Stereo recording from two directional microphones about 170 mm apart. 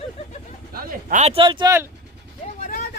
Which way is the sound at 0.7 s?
50° right (ahead or behind).